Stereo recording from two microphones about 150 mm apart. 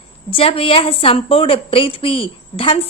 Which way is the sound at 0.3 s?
40° left (ahead or behind).